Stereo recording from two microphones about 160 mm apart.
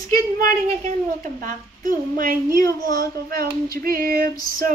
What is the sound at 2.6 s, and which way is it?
Speech, 25° left (ahead or behind).